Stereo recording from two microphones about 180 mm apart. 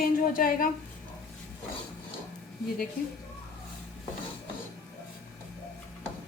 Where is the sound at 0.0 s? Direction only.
50° left (ahead or behind).